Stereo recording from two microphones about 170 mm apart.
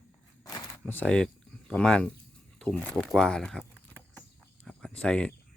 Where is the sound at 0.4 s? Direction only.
20° left (ahead or behind).